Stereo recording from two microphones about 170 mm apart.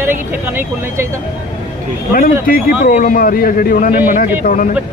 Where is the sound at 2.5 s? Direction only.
60° left (ahead or behind).